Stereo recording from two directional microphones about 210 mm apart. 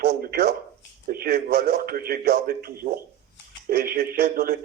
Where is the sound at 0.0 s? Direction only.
45° right (ahead or behind).